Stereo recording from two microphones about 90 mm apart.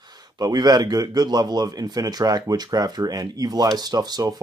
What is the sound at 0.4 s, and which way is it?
Speech, 45° right (ahead or behind).